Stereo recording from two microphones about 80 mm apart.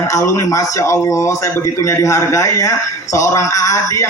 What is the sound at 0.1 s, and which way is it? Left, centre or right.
Speech, left.